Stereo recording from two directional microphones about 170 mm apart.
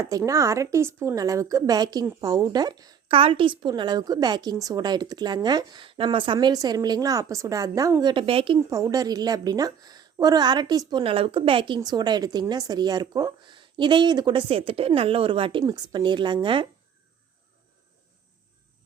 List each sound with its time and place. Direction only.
0.0 s a woman's voice: 20° right (ahead or behind)
8.7 s a woman's voice: 20° right (ahead or behind)